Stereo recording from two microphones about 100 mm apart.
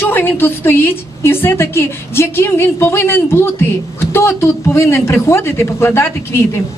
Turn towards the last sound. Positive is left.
turn(degrees=25)  # may be behind; listen again after turning